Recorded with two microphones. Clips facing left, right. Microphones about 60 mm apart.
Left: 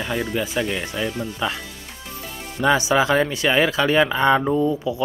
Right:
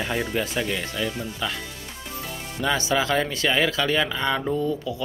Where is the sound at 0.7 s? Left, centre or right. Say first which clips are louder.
Left 2 dB; centre.